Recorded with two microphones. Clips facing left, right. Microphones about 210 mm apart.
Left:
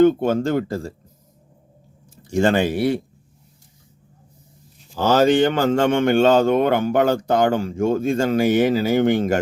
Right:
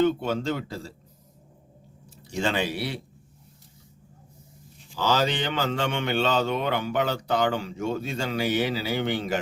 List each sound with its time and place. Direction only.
0.0 s a man's voice: 50° left (ahead or behind)
2.2 s a man's voice: 50° left (ahead or behind)
4.9 s a man's voice: 50° left (ahead or behind)